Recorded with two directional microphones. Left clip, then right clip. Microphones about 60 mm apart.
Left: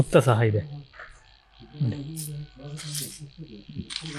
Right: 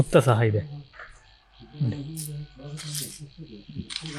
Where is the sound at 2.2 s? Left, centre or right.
Right.